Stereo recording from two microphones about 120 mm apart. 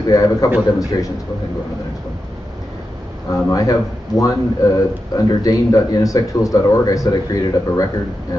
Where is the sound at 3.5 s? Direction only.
30° left (ahead or behind).